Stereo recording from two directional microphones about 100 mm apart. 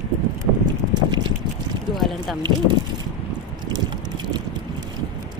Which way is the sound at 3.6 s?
45° right (ahead or behind).